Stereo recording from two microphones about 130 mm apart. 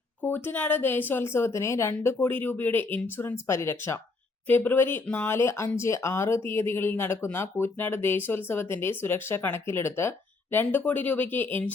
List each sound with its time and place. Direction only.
0.2 s speech: 15° left (ahead or behind)